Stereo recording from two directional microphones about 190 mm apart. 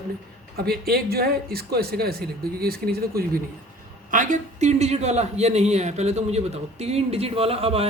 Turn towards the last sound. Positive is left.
turn(degrees=-30)  # may be behind; listen again after turning